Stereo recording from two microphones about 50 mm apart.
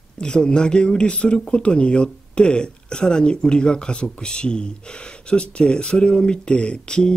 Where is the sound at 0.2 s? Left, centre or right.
Centre.